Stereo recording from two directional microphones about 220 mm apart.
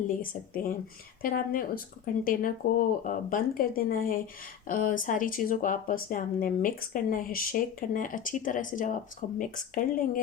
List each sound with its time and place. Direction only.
0.1 s speech: 40° left (ahead or behind)